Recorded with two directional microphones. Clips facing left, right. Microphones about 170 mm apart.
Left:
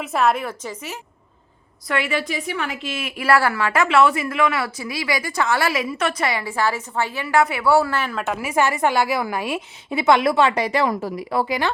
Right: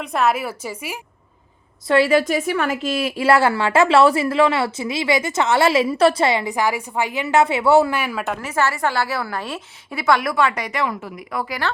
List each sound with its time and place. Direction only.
0.0 s a woman's voice: centre (ahead or behind)
1.9 s a woman's voice: 35° right (ahead or behind); by 8.2 s 10° right (ahead or behind)
8.2 s a woman's voice: centre (ahead or behind)
8.4 s a woman's voice: 15° left (ahead or behind)
10.0 s speech: 25° left (ahead or behind)